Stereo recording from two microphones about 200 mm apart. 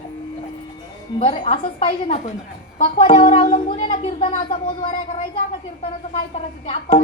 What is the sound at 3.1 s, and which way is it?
Speech, 40° left (ahead or behind).